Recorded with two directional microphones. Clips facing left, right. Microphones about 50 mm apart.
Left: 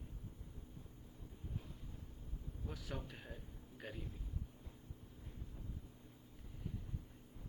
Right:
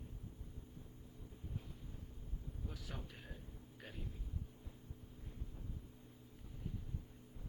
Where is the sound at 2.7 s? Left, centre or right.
Centre.